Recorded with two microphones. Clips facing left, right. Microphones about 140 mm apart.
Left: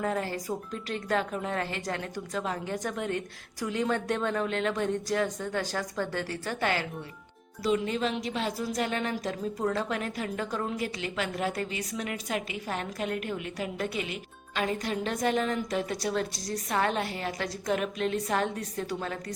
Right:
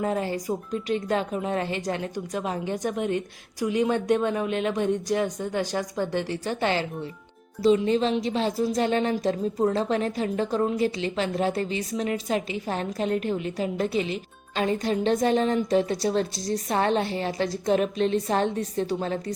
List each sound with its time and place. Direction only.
0.0 s a woman's voice: 20° right (ahead or behind)